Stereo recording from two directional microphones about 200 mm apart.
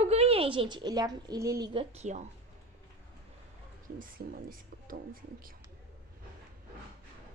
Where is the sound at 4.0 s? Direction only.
45° right (ahead or behind).